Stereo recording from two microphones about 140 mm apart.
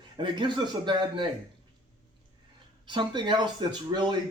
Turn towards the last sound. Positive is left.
turn(degrees=-30)  # may be behind; listen again after turning